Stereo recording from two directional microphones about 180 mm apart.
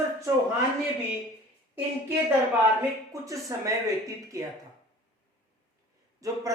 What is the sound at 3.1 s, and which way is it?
Speech, 20° right (ahead or behind).